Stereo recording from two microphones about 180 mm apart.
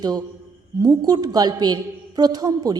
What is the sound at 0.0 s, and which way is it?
A woman's voice, 20° right (ahead or behind).